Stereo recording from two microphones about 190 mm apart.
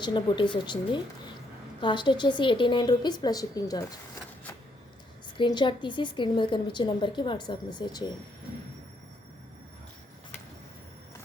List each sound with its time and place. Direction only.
0.0 s a woman's voice: 25° left (ahead or behind)
5.4 s a woman's voice: 25° left (ahead or behind)